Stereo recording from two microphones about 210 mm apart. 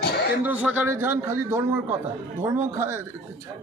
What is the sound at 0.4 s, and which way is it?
A man's voice, 5° right (ahead or behind).